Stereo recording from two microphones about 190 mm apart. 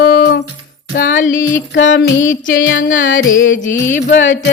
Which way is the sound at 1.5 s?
75° left (ahead or behind).